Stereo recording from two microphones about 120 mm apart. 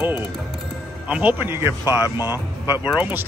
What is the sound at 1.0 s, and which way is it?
Speech, 15° right (ahead or behind).